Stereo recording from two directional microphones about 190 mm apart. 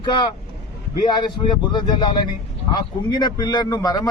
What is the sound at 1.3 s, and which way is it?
A man's voice, 25° left (ahead or behind).